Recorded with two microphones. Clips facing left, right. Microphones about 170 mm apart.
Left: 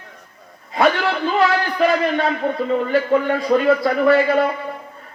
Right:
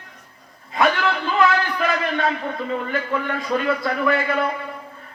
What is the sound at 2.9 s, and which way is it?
Speech, 40° left (ahead or behind).